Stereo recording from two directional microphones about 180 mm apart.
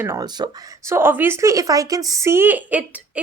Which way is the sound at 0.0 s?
20° right (ahead or behind).